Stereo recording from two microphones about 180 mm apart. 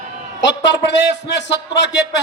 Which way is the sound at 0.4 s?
75° left (ahead or behind).